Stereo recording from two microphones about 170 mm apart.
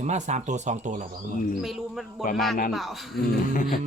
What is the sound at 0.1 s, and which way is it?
Speech, 45° right (ahead or behind).